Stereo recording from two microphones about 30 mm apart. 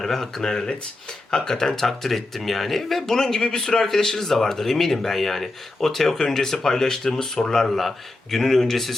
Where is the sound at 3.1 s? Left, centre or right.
Left.